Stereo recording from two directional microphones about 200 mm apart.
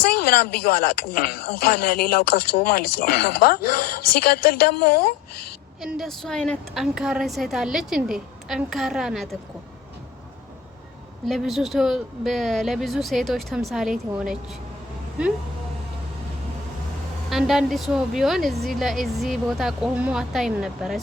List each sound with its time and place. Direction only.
0.0 s speech: 50° left (ahead or behind)
5.8 s a woman's voice: centre (ahead or behind)
11.3 s a woman's voice: centre (ahead or behind)
17.2 s a woman's voice: centre (ahead or behind)